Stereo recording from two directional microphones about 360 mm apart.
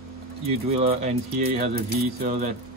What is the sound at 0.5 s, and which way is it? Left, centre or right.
Speech, centre.